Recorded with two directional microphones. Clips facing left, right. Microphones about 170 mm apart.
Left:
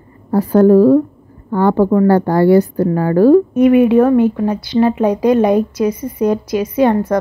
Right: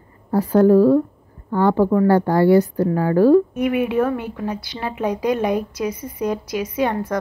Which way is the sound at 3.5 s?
35° left (ahead or behind).